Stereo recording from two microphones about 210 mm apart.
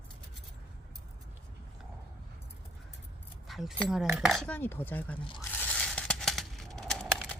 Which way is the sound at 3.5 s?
Centre (ahead or behind).